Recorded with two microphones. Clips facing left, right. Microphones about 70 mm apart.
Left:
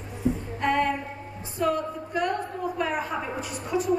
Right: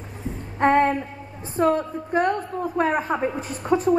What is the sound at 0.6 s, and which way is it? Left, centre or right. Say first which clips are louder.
Female singing: right 8 dB; right.